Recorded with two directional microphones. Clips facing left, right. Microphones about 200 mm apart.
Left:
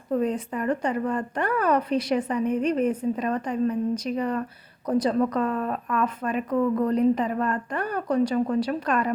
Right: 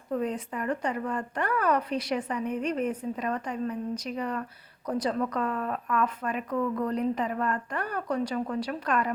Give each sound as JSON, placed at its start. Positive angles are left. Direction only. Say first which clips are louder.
{"t": 0.1, "sound": "a woman's voice", "louder": "left 5 dB", "side_deg": 30}